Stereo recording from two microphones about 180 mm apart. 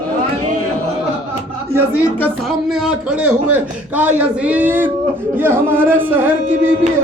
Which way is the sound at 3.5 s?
10° right (ahead or behind).